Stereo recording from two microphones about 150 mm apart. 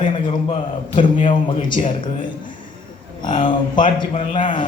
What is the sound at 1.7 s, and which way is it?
Speech, 65° left (ahead or behind).